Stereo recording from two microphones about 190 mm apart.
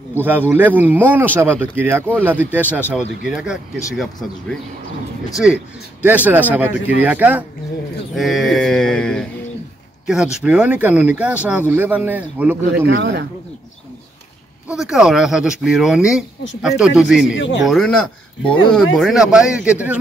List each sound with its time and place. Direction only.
0.1 s speech: 10° right (ahead or behind)
12.8 s speech: 65° right (ahead or behind)
14.7 s speech: 5° right (ahead or behind)
17.4 s speech: 70° left (ahead or behind)
17.6 s speech: 5° left (ahead or behind)